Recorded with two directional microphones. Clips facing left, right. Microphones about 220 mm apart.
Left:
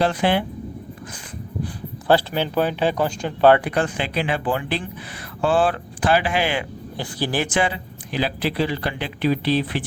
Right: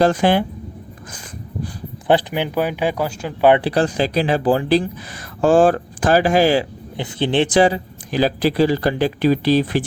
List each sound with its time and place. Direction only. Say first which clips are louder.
0.0 s speech: right 5 dB; 45° right (ahead or behind)
2.0 s speech: right 1 dB; 15° right (ahead or behind)
3.6 s speech: right 5 dB; 35° right (ahead or behind)
6.9 s speech: right 6 dB; 20° right (ahead or behind); by 9.8 s 40° right (ahead or behind)